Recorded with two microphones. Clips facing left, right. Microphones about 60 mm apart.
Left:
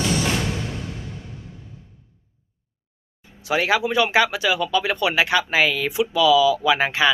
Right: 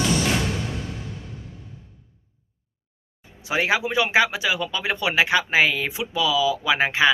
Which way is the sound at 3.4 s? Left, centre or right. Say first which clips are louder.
Left 2 dB; centre.